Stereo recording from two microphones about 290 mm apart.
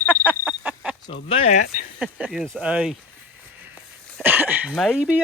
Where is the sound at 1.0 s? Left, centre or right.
Centre.